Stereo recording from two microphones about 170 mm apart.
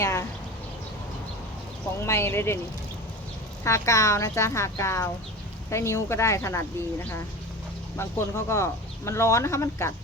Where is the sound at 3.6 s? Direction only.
20° left (ahead or behind).